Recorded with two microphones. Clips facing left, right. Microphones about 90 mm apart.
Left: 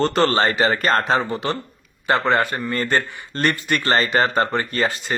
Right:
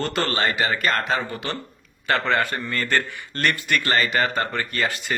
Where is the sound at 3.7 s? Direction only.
35° left (ahead or behind).